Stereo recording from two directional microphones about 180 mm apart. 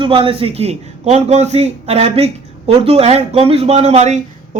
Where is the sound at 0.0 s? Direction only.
30° right (ahead or behind).